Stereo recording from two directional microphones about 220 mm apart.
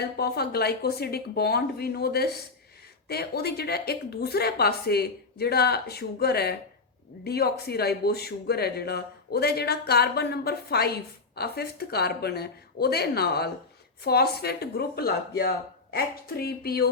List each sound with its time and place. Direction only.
0.0 s speech: 45° left (ahead or behind)